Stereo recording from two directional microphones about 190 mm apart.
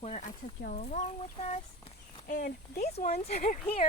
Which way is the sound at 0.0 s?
40° left (ahead or behind).